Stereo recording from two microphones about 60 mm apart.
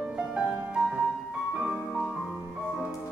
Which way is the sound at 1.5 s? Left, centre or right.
Centre.